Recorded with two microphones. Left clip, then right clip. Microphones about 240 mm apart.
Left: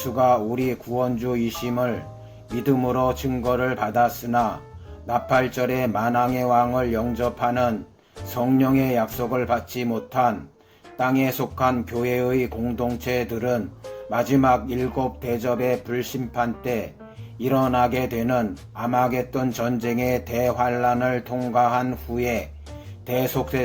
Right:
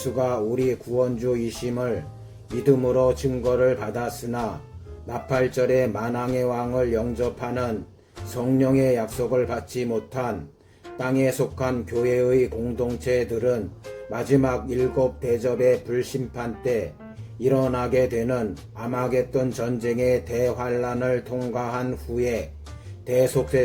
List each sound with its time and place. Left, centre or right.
0.0 s speech: centre